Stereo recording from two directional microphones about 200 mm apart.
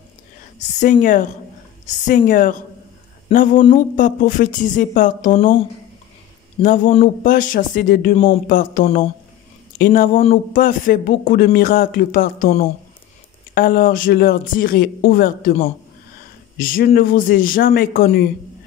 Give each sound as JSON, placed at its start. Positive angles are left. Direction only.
{"t": 0.7, "sound": "speech", "side_deg": 40}
{"t": 3.3, "sound": "speech", "side_deg": 30}
{"t": 3.7, "sound": "speech", "side_deg": 40}
{"t": 6.6, "sound": "speech", "side_deg": 40}
{"t": 16.5, "sound": "speech", "side_deg": 45}